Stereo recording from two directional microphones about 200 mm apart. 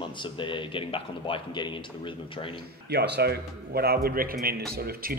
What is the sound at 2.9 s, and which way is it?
Speech, 55° right (ahead or behind).